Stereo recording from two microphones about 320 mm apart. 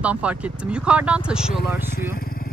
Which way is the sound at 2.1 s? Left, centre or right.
Left.